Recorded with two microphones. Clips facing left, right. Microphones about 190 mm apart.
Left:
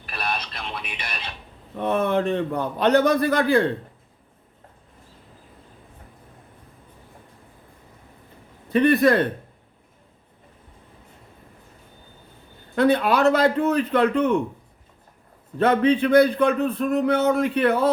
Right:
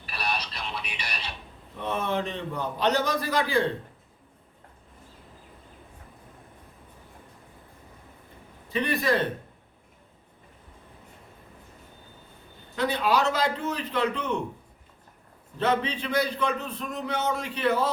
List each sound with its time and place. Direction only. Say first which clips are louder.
0.0 s a sound: left 2 dB; 50° left (ahead or behind)
1.8 s a man's voice: left 7 dB; 55° left (ahead or behind)
8.7 s a man's voice: left 9 dB; 55° left (ahead or behind)
12.7 s a man's voice: left 6 dB; 55° left (ahead or behind)
15.5 s a man's voice: left 8 dB; 55° left (ahead or behind)